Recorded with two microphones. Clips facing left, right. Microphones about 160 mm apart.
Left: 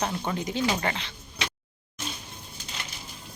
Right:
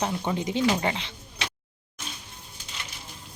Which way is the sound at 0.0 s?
15° right (ahead or behind).